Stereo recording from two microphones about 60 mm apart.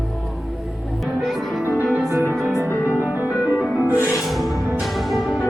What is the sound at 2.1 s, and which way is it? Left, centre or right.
Music, right.